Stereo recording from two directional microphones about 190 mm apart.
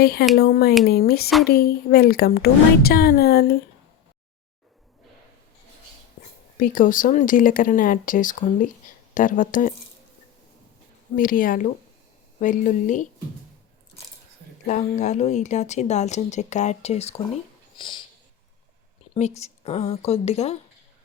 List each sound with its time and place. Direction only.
0.0 s a woman's voice: 60° left (ahead or behind)
6.6 s a woman's voice: 45° left (ahead or behind)
11.2 s a woman's voice: 50° left (ahead or behind)
14.7 s speech: 40° left (ahead or behind)
17.7 s a sound: 25° left (ahead or behind)
19.1 s speech: 35° left (ahead or behind)